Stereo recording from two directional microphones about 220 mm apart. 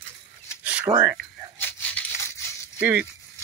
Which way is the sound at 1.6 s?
5° left (ahead or behind).